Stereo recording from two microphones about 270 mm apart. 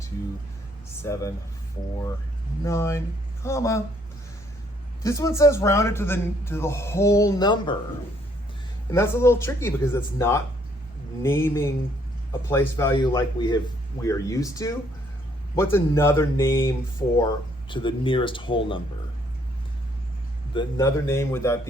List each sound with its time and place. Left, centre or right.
1.0 s a man's voice: centre
2.6 s a man's voice: centre
5.0 s a man's voice: centre
8.9 s a man's voice: centre
20.5 s a man's voice: centre